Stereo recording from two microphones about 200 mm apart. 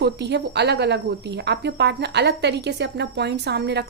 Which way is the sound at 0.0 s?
60° right (ahead or behind).